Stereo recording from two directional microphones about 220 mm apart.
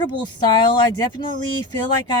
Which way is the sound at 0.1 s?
20° left (ahead or behind).